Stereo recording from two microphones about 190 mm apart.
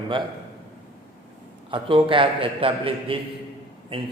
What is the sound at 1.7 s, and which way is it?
A man's voice, 25° right (ahead or behind).